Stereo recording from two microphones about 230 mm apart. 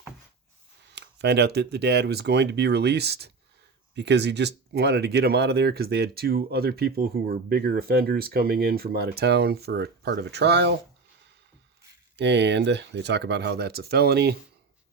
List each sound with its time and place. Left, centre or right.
0.9 s speech: right
12.1 s speech: right